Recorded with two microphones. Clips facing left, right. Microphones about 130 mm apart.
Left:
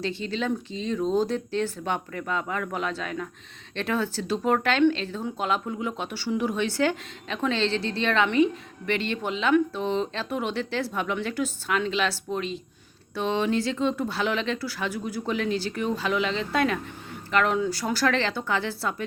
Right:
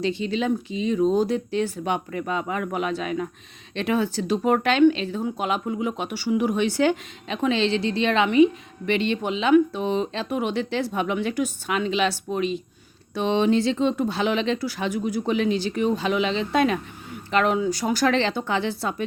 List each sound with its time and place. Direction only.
0.0 s speech: 15° right (ahead or behind)